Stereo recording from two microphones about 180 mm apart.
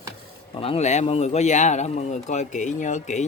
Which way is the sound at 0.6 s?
35° left (ahead or behind).